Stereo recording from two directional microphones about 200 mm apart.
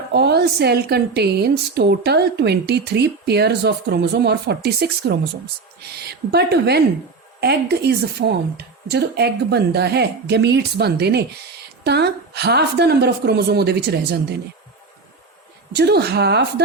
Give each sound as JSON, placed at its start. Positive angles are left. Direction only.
{"t": 0.1, "sound": "a woman's voice", "side_deg": -55}
{"t": 15.7, "sound": "a woman's voice", "side_deg": -55}